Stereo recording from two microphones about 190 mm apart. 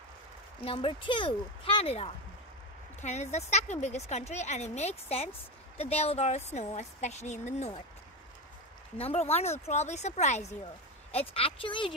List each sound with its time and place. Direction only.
0.7 s a woman's voice: 30° left (ahead or behind)
8.9 s a woman's voice: 30° left (ahead or behind)